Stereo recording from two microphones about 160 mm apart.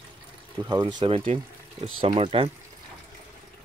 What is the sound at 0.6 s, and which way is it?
Speech, 25° right (ahead or behind).